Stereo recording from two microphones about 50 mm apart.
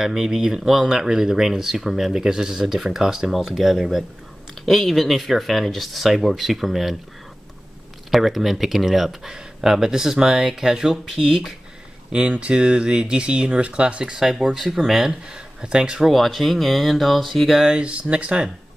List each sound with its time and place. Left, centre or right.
0.0 s speech: centre
8.1 s speech: centre
12.4 s speech: right
14.2 s speech: centre
15.0 s speech: centre
16.1 s speech: centre
17.6 s speech: right